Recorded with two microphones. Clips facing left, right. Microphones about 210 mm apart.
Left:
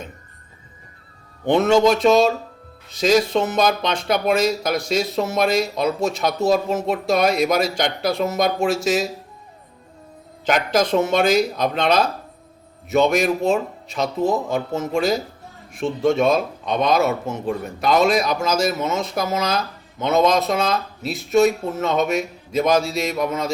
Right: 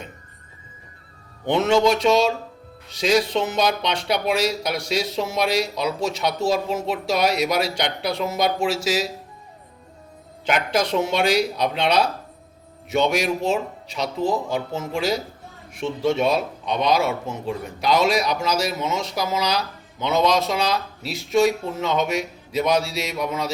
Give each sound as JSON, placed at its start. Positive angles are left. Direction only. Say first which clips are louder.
{"t": 1.5, "sound": "speech", "louder": "left 3 dB", "side_deg": 45}
{"t": 10.4, "sound": "speech", "louder": "left 3 dB", "side_deg": 45}